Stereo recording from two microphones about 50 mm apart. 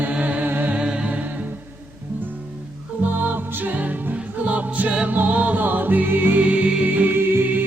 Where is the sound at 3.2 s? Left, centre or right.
Right.